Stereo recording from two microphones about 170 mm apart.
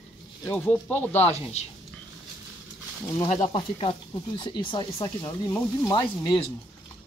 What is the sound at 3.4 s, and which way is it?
Speech, 35° left (ahead or behind).